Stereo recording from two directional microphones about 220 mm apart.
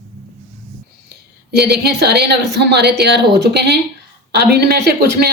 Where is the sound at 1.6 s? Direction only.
50° right (ahead or behind).